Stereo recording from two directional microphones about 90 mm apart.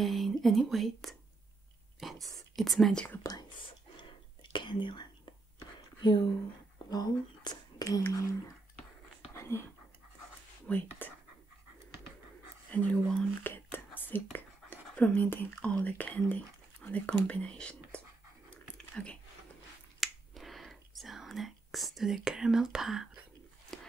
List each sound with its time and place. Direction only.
0.0 s speech: centre (ahead or behind)
3.3 s whispering: 45° left (ahead or behind)
3.6 s whispering: 65° left (ahead or behind)
5.8 s a sound: 55° left (ahead or behind)
6.9 s whispering: 45° left (ahead or behind)
8.1 s speech: 40° left (ahead or behind)
9.3 s whispering: 30° left (ahead or behind)
10.7 s speech: 20° left (ahead or behind)
12.7 s a sound: 20° left (ahead or behind)
13.1 s whispering: 15° left (ahead or behind)
15.2 s speech: 20° left (ahead or behind)
20.0 s whispering: centre (ahead or behind)
23.7 s a sound: 5° left (ahead or behind)